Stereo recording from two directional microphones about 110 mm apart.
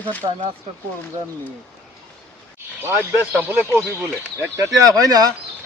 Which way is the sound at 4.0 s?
25° right (ahead or behind).